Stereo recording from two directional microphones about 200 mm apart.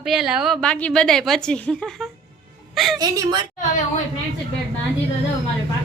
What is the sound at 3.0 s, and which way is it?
Speech, 20° right (ahead or behind).